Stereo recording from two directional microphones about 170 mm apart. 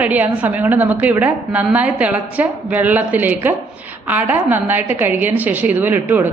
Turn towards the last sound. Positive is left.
turn(degrees=-10)  # may be behind; listen again after turning